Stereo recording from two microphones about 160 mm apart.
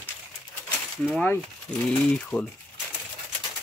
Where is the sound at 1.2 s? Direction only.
10° left (ahead or behind).